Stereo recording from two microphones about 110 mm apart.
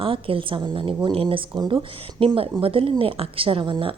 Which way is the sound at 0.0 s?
55° right (ahead or behind).